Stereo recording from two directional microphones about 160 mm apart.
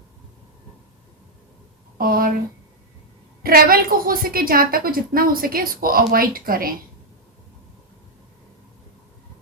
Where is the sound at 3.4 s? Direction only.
65° right (ahead or behind).